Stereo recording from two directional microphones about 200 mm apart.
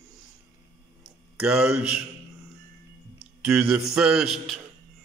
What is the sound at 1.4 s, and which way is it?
Speech, 5° right (ahead or behind).